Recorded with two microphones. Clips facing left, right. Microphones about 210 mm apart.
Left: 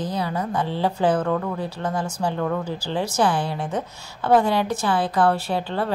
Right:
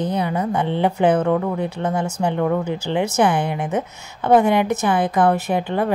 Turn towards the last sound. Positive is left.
turn(degrees=-15)  # may be behind; listen again after turning